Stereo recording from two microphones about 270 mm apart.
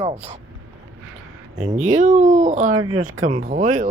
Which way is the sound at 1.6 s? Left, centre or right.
Right.